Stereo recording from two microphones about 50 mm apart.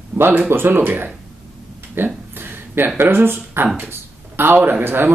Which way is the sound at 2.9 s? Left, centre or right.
Right.